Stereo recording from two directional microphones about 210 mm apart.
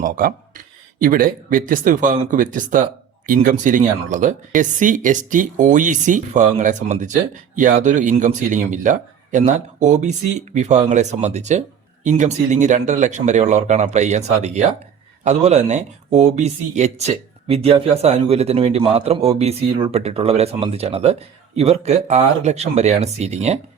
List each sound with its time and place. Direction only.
0.0 s a man's voice: 40° right (ahead or behind)